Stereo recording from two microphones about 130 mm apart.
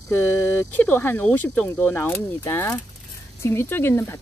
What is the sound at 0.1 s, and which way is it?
Speech, 15° left (ahead or behind).